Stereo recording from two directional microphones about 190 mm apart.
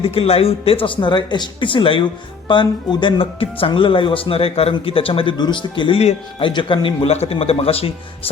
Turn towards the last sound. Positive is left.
turn(degrees=30)  # may be behind; listen again after turning